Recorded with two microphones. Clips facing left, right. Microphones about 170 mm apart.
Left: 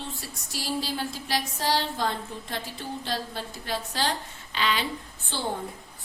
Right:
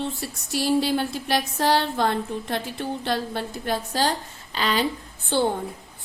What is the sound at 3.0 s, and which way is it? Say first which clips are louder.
A woman's voice: right 6 dB; 60° right (ahead or behind).